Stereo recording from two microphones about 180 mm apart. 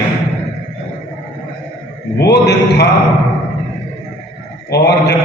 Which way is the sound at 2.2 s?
70° left (ahead or behind).